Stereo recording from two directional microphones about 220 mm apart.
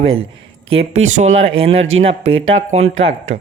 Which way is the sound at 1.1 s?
30° right (ahead or behind).